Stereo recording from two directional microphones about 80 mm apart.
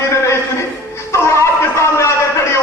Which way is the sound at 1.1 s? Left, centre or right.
Left.